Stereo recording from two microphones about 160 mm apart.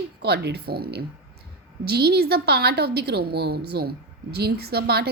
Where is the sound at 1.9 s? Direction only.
90° right.